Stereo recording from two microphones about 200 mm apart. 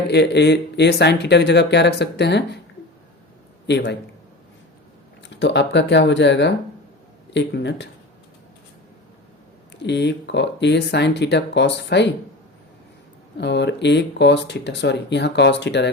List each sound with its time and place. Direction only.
0.1 s speech: 60° left (ahead or behind)
3.7 s speech: 60° left (ahead or behind)
5.3 s speech: 60° left (ahead or behind)
9.8 s speech: 60° left (ahead or behind)
13.4 s speech: 60° left (ahead or behind)